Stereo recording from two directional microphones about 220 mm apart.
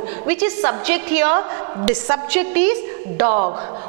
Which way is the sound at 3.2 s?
30° right (ahead or behind).